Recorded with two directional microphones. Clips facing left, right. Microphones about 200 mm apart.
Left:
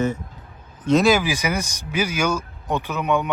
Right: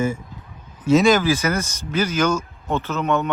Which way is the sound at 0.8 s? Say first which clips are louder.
Right 2 dB; 5° right (ahead or behind).